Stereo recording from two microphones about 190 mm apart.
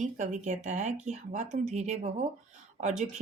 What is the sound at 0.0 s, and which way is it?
Speech, 40° right (ahead or behind).